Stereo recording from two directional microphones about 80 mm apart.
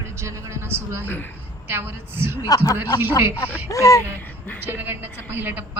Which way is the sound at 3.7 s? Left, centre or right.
Left.